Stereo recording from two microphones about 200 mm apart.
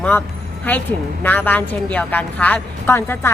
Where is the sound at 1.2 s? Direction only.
10° left (ahead or behind).